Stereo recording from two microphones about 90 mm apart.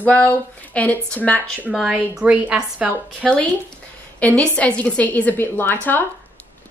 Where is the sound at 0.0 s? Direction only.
15° left (ahead or behind).